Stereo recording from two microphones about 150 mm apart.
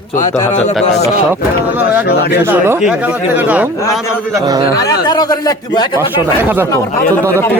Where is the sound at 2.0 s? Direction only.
90° left.